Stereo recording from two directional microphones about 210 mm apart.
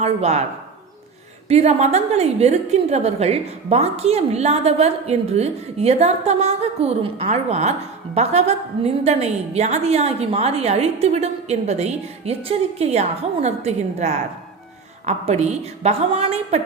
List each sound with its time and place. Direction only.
0.0 s a woman's voice: 30° right (ahead or behind)
1.5 s a woman's voice: 30° right (ahead or behind)